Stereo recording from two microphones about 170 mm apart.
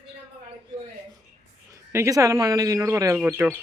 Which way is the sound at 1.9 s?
15° right (ahead or behind).